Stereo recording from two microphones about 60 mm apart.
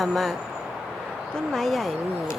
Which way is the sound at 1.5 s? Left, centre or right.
Centre.